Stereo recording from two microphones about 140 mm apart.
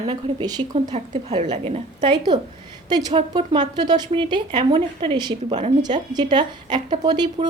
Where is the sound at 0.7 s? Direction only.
55° right (ahead or behind).